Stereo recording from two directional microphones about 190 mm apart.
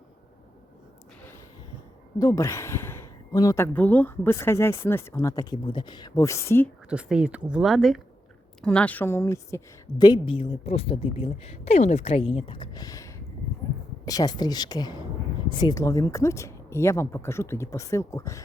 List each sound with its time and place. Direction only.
2.1 s a woman's voice: 15° left (ahead or behind)
6.9 s a woman's voice: 5° right (ahead or behind); by 9.6 s 15° left (ahead or behind)
10.0 s a woman's voice: 25° left (ahead or behind)